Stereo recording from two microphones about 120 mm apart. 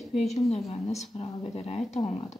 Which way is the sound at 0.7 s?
60° left (ahead or behind).